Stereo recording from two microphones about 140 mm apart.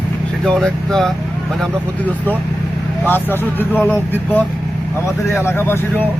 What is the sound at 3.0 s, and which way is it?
Speech, 15° left (ahead or behind).